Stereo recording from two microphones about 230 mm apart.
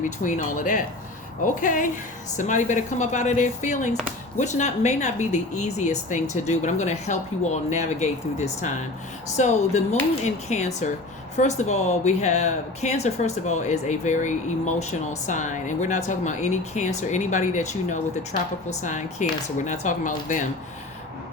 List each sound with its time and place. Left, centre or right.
0.0 s speech: left